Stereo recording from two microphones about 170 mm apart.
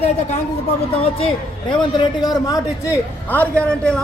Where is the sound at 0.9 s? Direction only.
35° left (ahead or behind).